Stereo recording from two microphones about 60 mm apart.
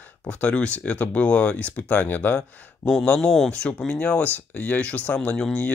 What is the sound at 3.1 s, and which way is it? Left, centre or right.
Speech, centre.